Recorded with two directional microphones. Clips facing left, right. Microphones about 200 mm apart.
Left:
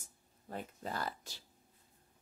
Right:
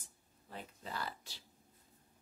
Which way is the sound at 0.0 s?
45° left (ahead or behind).